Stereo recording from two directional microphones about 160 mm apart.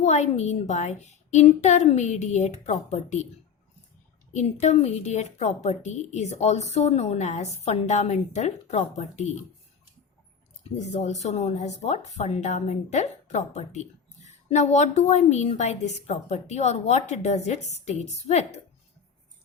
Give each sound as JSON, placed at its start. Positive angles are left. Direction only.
{"t": 0.0, "sound": "speech", "side_deg": 45}
{"t": 4.6, "sound": "speech", "side_deg": 45}
{"t": 10.6, "sound": "speech", "side_deg": 45}